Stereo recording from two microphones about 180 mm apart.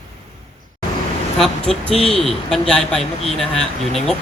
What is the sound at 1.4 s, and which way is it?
Speech, centre (ahead or behind).